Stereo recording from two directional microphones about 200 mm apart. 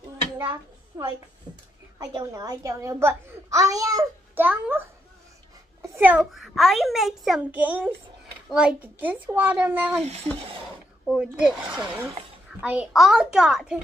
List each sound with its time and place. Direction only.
0.4 s a sound: 20° right (ahead or behind)
2.0 s a child's voice: 20° right (ahead or behind)
11.1 s a child's voice: 5° right (ahead or behind)